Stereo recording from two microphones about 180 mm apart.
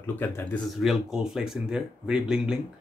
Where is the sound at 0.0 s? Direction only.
10° left (ahead or behind).